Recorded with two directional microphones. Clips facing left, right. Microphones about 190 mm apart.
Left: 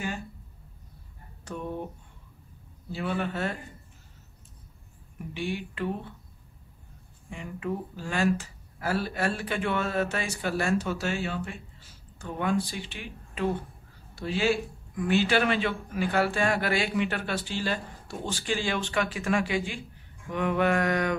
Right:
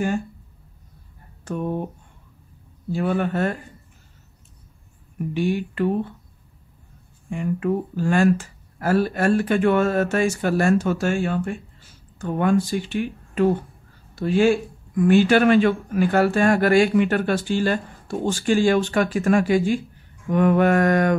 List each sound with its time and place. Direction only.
1.4 s speech: 55° right (ahead or behind)
2.9 s speech: 50° right (ahead or behind)
5.3 s speech: 45° right (ahead or behind)
7.2 s speech: 50° right (ahead or behind)